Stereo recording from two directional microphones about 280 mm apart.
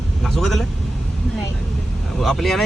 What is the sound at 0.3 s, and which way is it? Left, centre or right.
Speech, centre.